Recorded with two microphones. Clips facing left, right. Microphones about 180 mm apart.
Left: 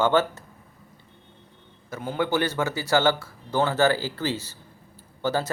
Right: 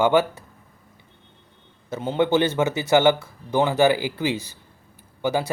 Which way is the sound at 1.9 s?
25° right (ahead or behind).